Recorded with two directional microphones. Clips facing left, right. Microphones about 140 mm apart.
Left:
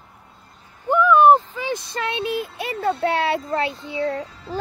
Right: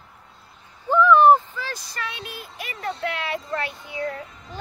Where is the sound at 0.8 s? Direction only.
10° left (ahead or behind).